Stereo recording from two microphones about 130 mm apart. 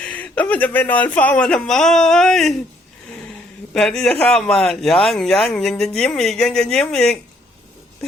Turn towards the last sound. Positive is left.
turn(degrees=5)  # may be behind; listen again after turning